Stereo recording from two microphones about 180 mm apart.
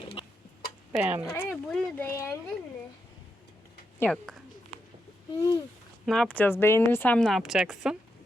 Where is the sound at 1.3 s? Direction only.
5° left (ahead or behind).